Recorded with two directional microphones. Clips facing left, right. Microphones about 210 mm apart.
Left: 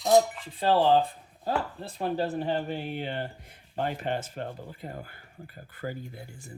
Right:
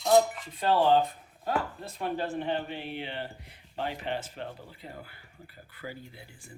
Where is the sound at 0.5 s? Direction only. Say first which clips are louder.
Left 1 dB; 30° left (ahead or behind).